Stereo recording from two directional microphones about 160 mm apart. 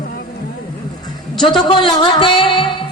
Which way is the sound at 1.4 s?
30° left (ahead or behind).